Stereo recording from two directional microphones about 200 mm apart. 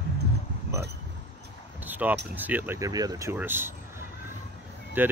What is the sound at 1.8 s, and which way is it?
Speech, 10° right (ahead or behind).